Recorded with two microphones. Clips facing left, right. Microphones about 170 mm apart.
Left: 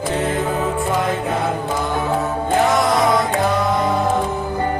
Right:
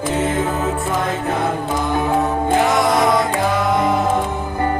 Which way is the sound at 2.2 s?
Centre (ahead or behind).